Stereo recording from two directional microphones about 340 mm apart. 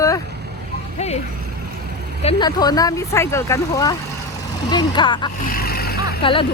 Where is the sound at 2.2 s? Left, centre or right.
Centre.